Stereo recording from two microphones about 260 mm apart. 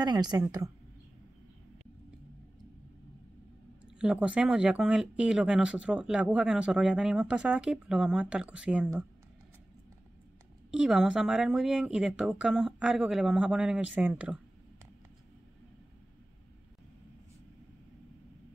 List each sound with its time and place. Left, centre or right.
0.0 s a woman's voice: centre
4.0 s speech: centre
10.7 s speech: centre